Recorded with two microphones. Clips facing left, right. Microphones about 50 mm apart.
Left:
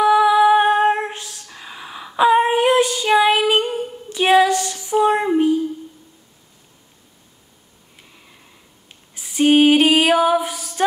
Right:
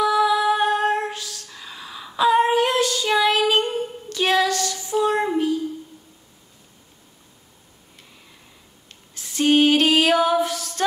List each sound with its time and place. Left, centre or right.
0.0 s female singing: left
9.1 s female singing: centre